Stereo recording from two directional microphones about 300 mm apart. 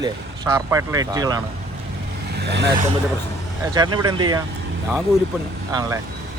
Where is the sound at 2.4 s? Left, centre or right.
Right.